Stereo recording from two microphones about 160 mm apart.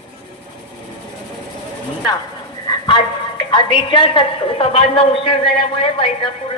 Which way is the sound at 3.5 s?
30° left (ahead or behind).